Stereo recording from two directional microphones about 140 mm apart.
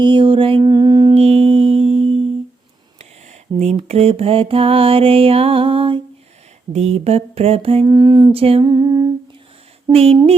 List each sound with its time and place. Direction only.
0.0 s music: 35° right (ahead or behind)
1.1 s music: 45° right (ahead or behind)
3.6 s mantra: 50° right (ahead or behind)
6.7 s mantra: 50° right (ahead or behind)
7.9 s a sound: 30° right (ahead or behind)
8.3 s mantra: 45° right (ahead or behind)
8.6 s humming: 25° right (ahead or behind)
9.9 s mantra: 45° right (ahead or behind)